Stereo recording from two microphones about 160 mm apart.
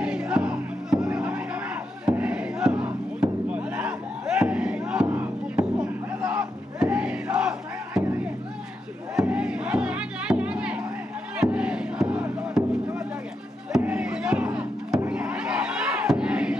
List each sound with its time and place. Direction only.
0.0 s music: 5° right (ahead or behind)
2.0 s battle cry: 5° right (ahead or behind)
9.1 s music: 5° right (ahead or behind)
13.7 s a sound: 5° right (ahead or behind)